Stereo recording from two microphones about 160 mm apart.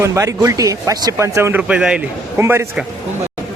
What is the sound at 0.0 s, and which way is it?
A man's voice, 20° right (ahead or behind).